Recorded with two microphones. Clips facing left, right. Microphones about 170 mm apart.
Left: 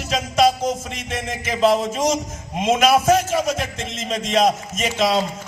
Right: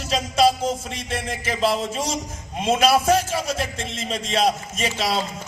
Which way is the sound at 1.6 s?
40° left (ahead or behind).